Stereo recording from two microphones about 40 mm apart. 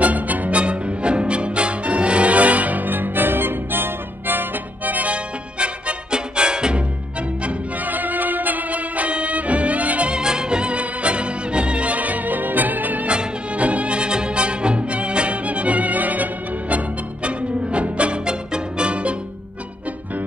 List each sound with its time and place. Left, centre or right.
0.0 s music: right
0.6 s music: right
5.1 s music: right
7.8 s music: right
10.1 s music: centre; by 13.0 s right
13.0 s music: right